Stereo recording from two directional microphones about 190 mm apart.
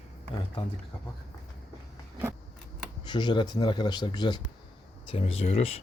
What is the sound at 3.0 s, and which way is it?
Speech, 25° left (ahead or behind).